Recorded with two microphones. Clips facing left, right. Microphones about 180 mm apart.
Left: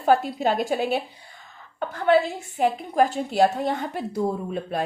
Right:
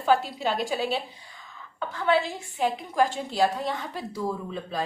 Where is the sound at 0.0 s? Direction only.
55° left (ahead or behind).